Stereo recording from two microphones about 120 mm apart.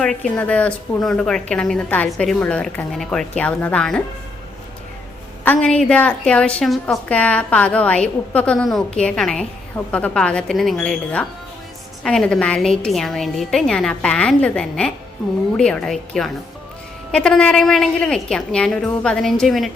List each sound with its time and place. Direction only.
0.3 s a woman's voice: 10° left (ahead or behind)
5.5 s a woman's voice: 10° left (ahead or behind)